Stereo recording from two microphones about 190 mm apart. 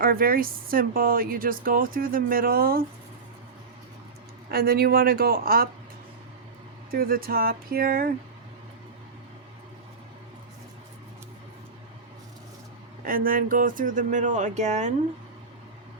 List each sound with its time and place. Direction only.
0.0 s speech: 50° right (ahead or behind)
4.5 s speech: 55° right (ahead or behind)
6.9 s speech: 50° right (ahead or behind)
13.1 s speech: 50° right (ahead or behind)